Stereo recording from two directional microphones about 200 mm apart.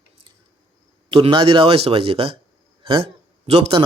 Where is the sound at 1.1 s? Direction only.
25° right (ahead or behind).